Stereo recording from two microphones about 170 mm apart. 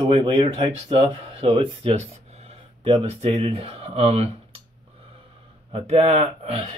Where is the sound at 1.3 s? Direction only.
35° right (ahead or behind).